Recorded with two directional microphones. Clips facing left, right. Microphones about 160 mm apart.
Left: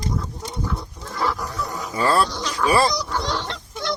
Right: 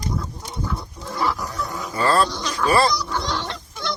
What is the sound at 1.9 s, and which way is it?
Speech, 15° left (ahead or behind).